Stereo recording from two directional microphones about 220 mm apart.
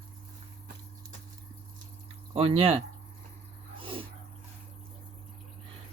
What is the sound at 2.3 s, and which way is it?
Speech, 25° right (ahead or behind).